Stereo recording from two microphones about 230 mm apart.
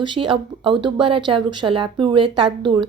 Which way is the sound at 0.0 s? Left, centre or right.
Right.